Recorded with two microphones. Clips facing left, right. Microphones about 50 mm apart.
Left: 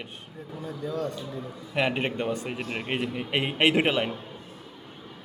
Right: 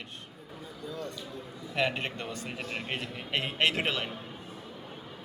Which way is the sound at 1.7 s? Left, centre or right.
Centre.